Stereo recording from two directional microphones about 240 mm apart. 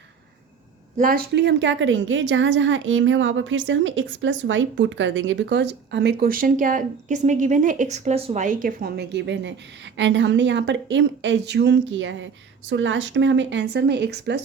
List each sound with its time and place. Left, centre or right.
0.9 s a woman's voice: right